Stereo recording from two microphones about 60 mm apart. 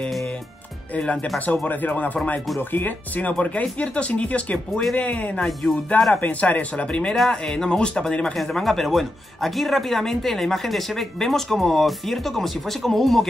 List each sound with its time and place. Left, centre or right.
1.5 s speech: left
5.4 s speech: centre
6.2 s speech: left
8.4 s speech: centre